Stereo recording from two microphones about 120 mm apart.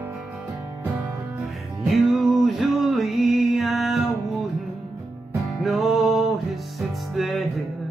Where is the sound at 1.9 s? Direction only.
Centre (ahead or behind).